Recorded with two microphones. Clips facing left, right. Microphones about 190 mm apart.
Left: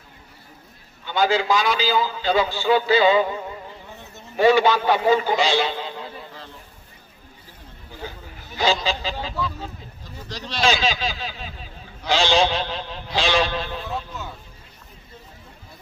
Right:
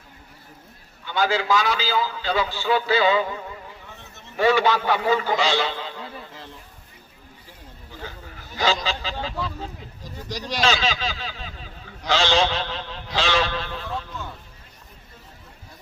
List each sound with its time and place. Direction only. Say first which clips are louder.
1.0 s a man's voice: left 2 dB; 20° left (ahead or behind)
8.6 s speech: left 2 dB; 15° left (ahead or behind)
10.0 s a sound: right 3 dB; 15° right (ahead or behind)
10.6 s speech: left 2 dB; 15° left (ahead or behind)